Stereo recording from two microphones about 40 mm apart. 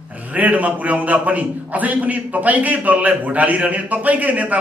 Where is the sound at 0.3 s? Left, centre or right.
Right.